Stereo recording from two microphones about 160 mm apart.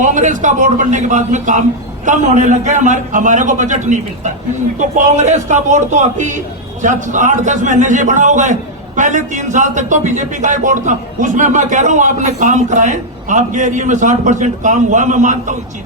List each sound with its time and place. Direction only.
0.0 s a man's voice: 50° right (ahead or behind)